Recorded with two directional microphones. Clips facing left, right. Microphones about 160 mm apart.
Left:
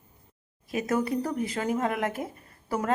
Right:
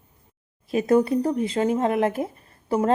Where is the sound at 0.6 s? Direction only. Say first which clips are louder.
Right 8 dB; 30° right (ahead or behind).